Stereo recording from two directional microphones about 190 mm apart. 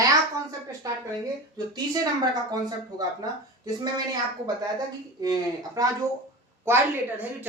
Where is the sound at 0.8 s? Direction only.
15° right (ahead or behind).